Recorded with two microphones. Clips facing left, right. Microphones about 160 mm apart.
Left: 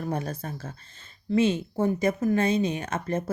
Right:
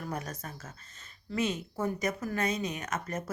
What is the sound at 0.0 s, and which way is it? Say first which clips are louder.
Speech: left 7 dB; 30° left (ahead or behind).